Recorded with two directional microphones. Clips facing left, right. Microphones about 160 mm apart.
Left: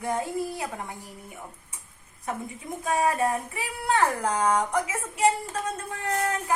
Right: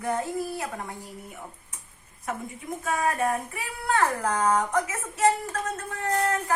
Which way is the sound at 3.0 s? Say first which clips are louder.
Left 2 dB; 20° left (ahead or behind).